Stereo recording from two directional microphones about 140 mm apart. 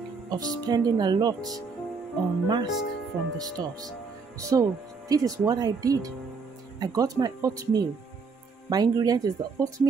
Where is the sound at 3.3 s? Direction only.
25° right (ahead or behind).